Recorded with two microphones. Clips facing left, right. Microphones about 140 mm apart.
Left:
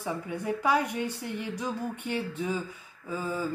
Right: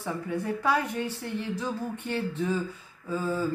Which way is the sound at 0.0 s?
10° left (ahead or behind).